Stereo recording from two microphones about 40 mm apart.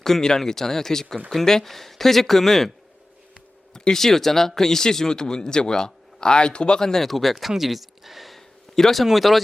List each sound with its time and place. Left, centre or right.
0.0 s speech: centre
3.8 s speech: centre
6.8 s speech: centre
8.7 s speech: centre